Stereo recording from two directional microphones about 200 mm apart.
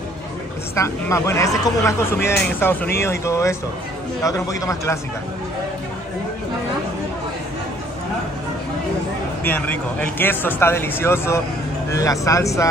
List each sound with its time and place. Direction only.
0.7 s speech: 15° left (ahead or behind)
9.4 s speech: 10° left (ahead or behind)